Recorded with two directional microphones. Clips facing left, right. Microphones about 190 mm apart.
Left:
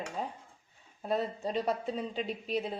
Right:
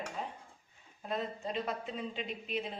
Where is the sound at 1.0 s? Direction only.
35° left (ahead or behind).